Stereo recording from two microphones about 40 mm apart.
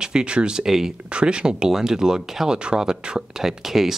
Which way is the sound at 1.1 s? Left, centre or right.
Right.